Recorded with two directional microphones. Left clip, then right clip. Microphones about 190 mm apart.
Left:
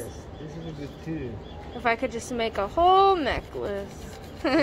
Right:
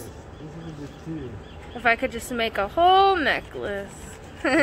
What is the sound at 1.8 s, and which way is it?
Speech, 10° right (ahead or behind).